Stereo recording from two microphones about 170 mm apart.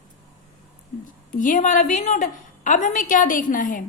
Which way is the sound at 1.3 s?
50° left (ahead or behind).